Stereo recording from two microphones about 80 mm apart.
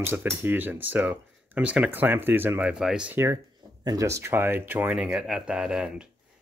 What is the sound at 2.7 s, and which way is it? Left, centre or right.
Speech, centre.